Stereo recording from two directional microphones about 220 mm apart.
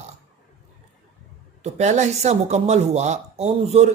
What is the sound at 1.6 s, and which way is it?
Speech, 30° right (ahead or behind).